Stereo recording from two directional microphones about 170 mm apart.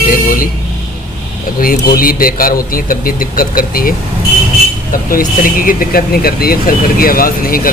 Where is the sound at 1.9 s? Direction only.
60° left (ahead or behind).